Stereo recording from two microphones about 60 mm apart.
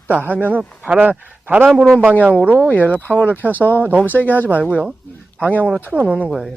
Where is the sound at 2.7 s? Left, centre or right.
Left.